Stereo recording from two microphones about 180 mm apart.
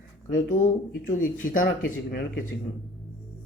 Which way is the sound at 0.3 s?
50° left (ahead or behind).